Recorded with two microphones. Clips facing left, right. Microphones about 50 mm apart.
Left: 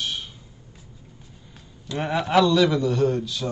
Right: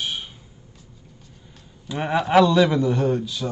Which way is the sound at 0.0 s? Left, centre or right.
Centre.